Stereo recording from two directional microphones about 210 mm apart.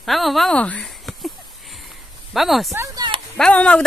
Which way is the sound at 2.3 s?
Centre (ahead or behind).